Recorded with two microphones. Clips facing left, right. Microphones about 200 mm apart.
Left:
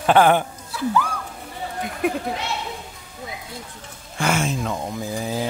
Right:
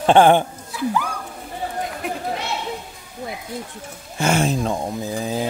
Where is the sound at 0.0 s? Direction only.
25° right (ahead or behind).